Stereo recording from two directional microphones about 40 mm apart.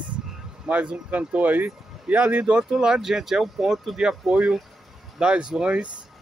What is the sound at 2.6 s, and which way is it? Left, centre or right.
Speech, centre.